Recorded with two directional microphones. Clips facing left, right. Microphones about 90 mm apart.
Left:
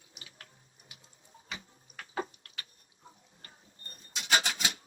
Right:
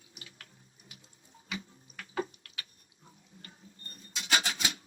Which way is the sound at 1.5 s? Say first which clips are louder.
Right 4 dB; 30° left (ahead or behind).